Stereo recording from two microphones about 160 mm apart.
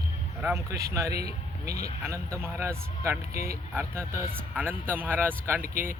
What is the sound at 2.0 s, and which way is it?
Speech, 20° right (ahead or behind).